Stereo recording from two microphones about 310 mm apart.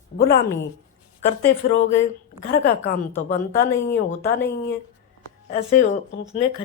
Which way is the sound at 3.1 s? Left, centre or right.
Centre.